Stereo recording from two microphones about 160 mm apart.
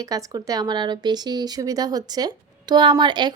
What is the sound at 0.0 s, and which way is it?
Speech, 20° right (ahead or behind).